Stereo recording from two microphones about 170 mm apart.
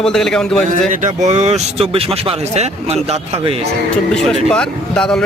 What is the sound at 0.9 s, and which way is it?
Speech, 45° right (ahead or behind).